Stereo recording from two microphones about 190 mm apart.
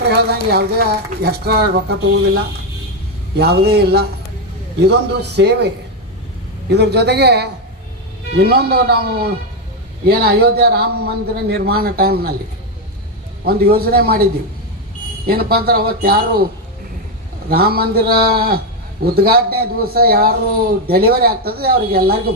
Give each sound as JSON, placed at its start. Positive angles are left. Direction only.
{"t": 0.3, "sound": "a man's voice", "side_deg": -55}
{"t": 3.3, "sound": "a man's voice", "side_deg": -55}
{"t": 13.4, "sound": "a man's voice", "side_deg": -55}
{"t": 15.3, "sound": "a man's voice", "side_deg": -55}
{"t": 17.5, "sound": "a man's voice", "side_deg": -55}